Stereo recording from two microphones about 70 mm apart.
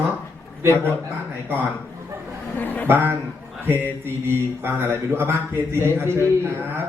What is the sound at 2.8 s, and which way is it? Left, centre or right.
Speech, right.